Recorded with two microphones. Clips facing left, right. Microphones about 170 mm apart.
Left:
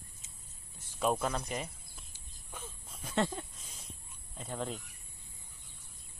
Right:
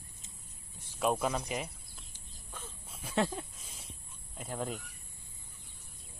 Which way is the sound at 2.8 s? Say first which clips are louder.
Right 1 dB; 5° right (ahead or behind).